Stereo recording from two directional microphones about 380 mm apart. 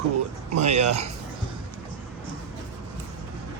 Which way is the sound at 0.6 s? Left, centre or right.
Centre.